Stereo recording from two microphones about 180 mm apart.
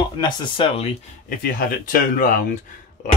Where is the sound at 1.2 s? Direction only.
55° left (ahead or behind).